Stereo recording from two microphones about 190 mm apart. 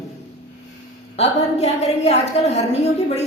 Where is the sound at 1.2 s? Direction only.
35° left (ahead or behind).